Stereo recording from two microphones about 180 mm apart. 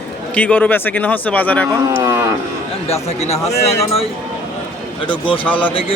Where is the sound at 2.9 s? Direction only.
35° left (ahead or behind).